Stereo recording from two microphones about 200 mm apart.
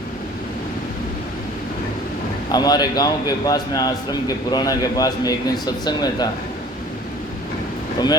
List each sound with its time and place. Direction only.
2.5 s a man's voice: 20° left (ahead or behind)